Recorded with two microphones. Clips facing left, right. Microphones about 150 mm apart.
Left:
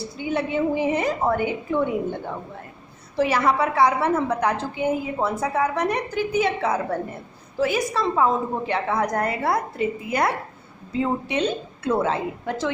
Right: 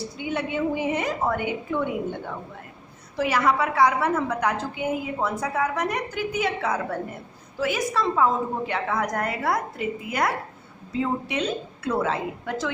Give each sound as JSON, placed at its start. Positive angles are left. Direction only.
{"t": 0.0, "sound": "a woman's voice", "side_deg": 35}